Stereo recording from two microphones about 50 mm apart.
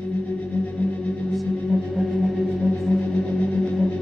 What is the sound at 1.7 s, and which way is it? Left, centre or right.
Music, centre.